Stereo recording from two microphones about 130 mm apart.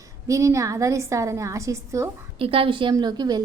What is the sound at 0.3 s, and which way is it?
A woman's voice, 25° right (ahead or behind).